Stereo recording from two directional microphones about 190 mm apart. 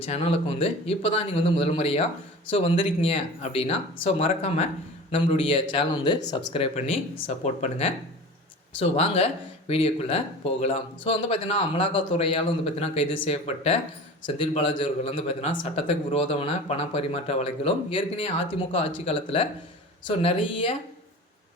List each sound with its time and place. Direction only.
0.0 s a man's voice: 30° left (ahead or behind)